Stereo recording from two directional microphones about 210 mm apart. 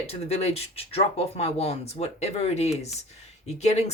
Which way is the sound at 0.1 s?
30° left (ahead or behind).